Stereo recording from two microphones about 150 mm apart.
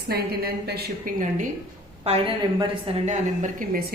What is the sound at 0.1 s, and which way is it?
A woman's voice, 90° right.